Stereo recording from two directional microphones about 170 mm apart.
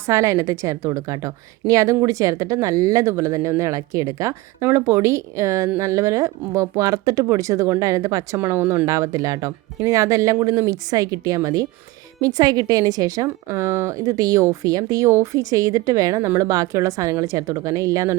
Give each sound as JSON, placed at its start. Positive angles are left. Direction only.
{"t": 0.0, "sound": "a woman's voice", "side_deg": -15}